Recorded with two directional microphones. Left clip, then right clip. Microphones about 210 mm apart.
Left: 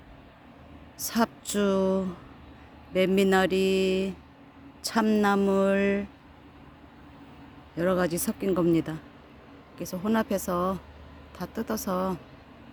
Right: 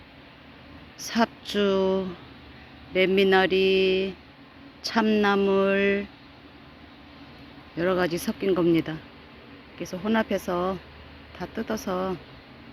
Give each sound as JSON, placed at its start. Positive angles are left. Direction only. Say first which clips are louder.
{"t": 1.0, "sound": "mantra", "louder": "right 2 dB", "side_deg": 15}
{"t": 7.8, "sound": "mantra", "louder": "right 1 dB", "side_deg": 15}